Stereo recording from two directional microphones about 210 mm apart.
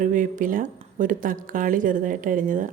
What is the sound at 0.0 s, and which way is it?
A woman's voice, 40° right (ahead or behind).